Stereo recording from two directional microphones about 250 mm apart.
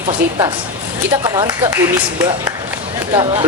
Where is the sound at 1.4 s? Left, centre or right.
Centre.